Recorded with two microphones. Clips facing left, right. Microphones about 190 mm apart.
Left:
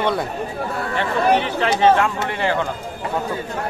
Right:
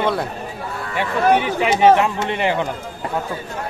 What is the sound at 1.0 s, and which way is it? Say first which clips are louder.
Speech: right 2 dB; 10° right (ahead or behind).